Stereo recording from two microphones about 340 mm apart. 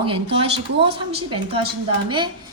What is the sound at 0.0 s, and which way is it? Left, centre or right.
A woman's voice, centre.